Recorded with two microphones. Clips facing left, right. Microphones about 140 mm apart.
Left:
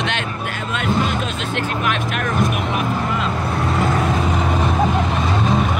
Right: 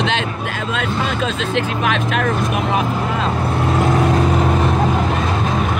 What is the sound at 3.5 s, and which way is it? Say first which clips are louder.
Vehicle: right 3 dB; centre (ahead or behind).